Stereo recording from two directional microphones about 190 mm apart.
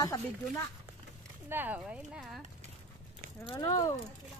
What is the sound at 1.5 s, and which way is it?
Speech, 10° right (ahead or behind).